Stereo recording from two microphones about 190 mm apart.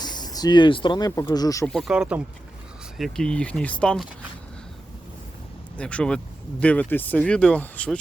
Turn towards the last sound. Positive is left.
turn(degrees=5)  # may be behind; listen again after turning